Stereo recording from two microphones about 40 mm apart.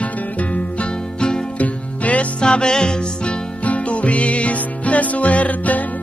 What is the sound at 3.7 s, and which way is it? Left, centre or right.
Music, left.